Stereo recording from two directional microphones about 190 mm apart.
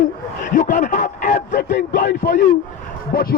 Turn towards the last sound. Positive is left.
turn(degrees=50)  # may be behind; listen again after turning